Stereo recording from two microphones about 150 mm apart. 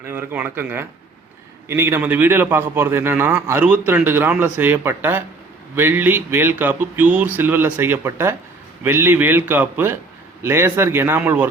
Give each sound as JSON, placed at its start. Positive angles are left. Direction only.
{"t": 0.0, "sound": "a man's voice", "side_deg": -15}